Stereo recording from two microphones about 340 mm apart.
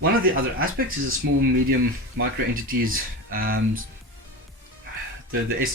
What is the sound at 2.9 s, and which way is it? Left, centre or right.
Music, right.